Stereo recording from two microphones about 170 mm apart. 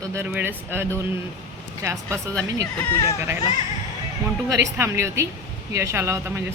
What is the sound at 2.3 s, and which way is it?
Speech, 10° left (ahead or behind).